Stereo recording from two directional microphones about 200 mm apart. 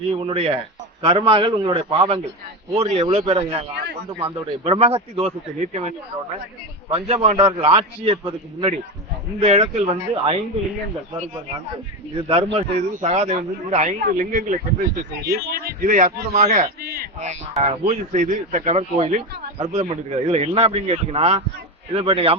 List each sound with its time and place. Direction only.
0.1 s a man's voice: 30° right (ahead or behind)
12.1 s speech: 30° right (ahead or behind); by 17.1 s 50° right (ahead or behind)
17.2 s a man's voice: 35° right (ahead or behind)